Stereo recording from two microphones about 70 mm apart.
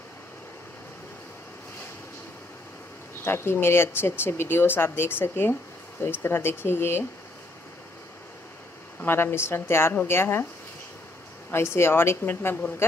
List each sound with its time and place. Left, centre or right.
3.3 s speech: left
9.0 s speech: left
11.5 s speech: left